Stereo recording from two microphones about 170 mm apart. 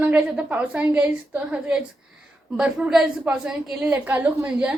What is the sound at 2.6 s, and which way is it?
A woman's voice, 5° right (ahead or behind).